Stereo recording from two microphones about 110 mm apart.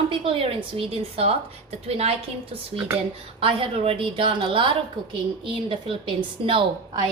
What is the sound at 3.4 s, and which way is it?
A woman's voice, 55° right (ahead or behind).